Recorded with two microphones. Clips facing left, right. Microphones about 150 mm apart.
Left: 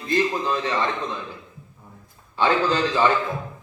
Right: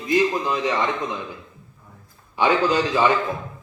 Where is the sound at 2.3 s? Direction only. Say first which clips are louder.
Right 2 dB; 15° right (ahead or behind).